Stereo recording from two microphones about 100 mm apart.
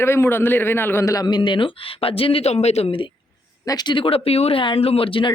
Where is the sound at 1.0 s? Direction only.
40° left (ahead or behind); by 3.1 s 65° left (ahead or behind).